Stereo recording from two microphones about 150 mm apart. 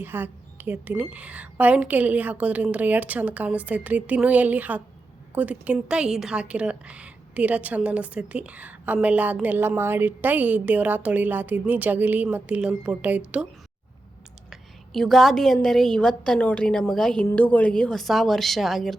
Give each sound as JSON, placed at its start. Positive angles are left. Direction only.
{"t": 0.0, "sound": "a woman's voice", "side_deg": -15}
{"t": 14.5, "sound": "a woman's voice", "side_deg": 0}